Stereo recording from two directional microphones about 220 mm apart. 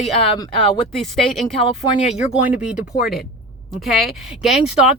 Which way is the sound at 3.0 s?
Centre (ahead or behind).